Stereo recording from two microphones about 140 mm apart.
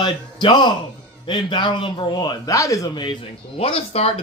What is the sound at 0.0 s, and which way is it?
A man's voice, 35° left (ahead or behind).